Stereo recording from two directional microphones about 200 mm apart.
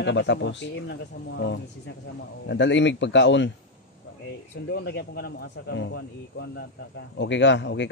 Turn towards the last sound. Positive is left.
turn(degrees=65)  # may be behind; listen again after turning